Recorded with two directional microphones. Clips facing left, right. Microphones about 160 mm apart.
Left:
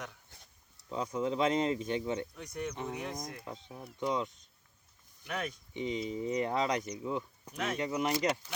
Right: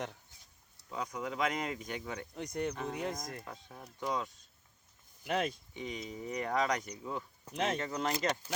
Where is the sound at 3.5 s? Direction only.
20° left (ahead or behind).